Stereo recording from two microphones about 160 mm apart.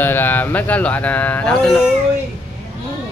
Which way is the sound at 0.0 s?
15° left (ahead or behind).